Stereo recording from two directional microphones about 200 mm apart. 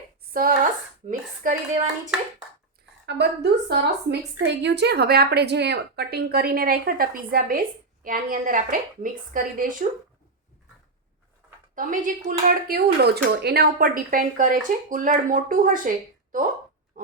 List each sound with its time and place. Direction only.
0.3 s speech: 45° right (ahead or behind)
3.1 s a woman's voice: 55° right (ahead or behind)
11.7 s a woman's voice: 40° right (ahead or behind)